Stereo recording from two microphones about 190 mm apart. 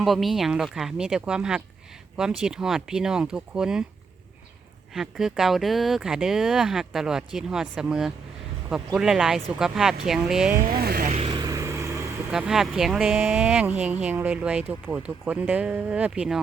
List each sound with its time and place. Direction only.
0.0 s speech: centre (ahead or behind)
4.9 s speech: centre (ahead or behind)
10.7 s speech: 55° right (ahead or behind)
11.1 s vehicle: 25° right (ahead or behind)
12.3 s speech: centre (ahead or behind)